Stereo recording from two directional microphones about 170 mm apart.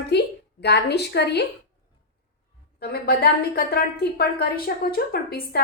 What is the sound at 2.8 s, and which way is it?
A woman's voice, 65° left (ahead or behind).